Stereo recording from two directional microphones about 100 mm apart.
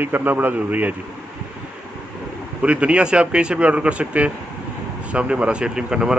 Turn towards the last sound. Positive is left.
turn(degrees=-10)  # may be behind; listen again after turning